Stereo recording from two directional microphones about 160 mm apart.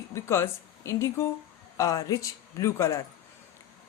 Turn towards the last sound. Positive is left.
turn(degrees=20)  # may be behind; listen again after turning